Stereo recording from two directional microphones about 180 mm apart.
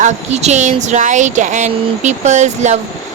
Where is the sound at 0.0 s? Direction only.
40° right (ahead or behind).